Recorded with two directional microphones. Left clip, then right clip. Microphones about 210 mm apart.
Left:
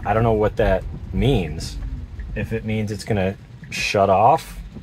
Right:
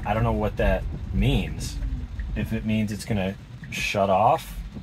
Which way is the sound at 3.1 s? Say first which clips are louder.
Left 6 dB; 45° left (ahead or behind).